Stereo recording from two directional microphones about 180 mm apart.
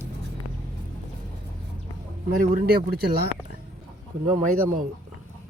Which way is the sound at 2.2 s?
60° right (ahead or behind).